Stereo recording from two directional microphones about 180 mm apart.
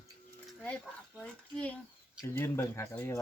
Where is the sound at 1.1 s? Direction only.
5° left (ahead or behind).